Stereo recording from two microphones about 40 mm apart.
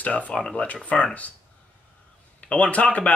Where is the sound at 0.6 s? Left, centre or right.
Left.